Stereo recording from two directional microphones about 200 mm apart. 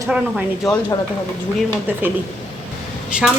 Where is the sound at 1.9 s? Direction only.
10° right (ahead or behind).